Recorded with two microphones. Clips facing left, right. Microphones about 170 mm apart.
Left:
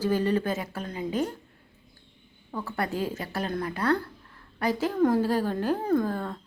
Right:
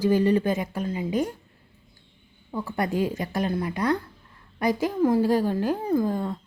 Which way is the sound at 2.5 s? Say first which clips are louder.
Right 4 dB; 10° right (ahead or behind).